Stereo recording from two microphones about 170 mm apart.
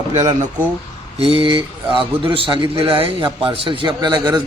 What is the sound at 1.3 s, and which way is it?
A man's voice, 30° right (ahead or behind).